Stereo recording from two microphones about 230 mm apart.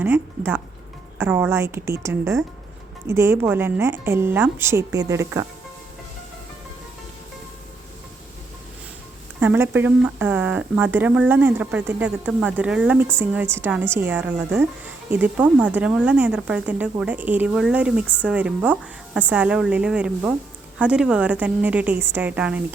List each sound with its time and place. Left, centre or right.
0.0 s speech: centre
9.4 s a woman's voice: centre